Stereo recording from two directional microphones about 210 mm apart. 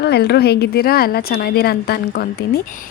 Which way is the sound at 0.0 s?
50° left (ahead or behind).